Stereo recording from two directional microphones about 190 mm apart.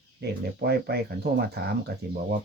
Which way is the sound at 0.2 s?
60° right (ahead or behind).